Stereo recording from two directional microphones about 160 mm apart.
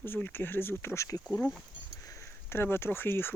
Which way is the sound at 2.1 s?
15° left (ahead or behind).